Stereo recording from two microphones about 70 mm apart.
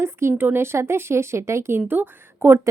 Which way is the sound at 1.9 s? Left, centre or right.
Right.